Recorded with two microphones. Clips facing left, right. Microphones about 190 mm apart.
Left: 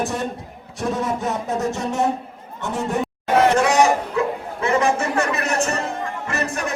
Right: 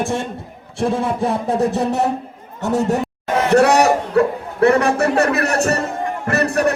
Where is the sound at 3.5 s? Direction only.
65° right (ahead or behind).